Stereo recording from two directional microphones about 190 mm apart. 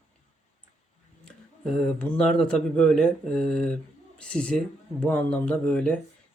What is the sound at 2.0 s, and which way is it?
Speech, 5° left (ahead or behind).